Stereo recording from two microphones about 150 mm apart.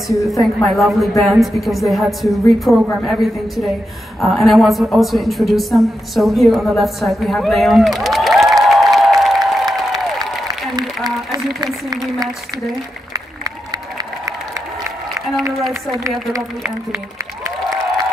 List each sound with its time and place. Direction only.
0.3 s a woman's voice: centre (ahead or behind)
11.6 s speech: 25° right (ahead or behind)
15.9 s a woman's voice: 25° right (ahead or behind)